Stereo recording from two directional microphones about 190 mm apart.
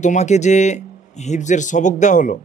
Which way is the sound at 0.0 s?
40° left (ahead or behind).